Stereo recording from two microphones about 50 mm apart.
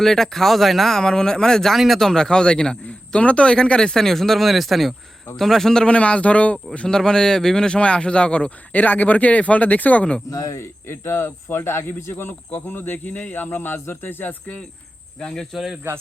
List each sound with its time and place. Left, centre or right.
0.0 s a man's voice: centre
1.7 s a man's voice: centre
5.8 s speech: left
6.8 s speech: centre; by 10.2 s left
10.4 s speech: left
10.8 s speech: left
15.2 s speech: centre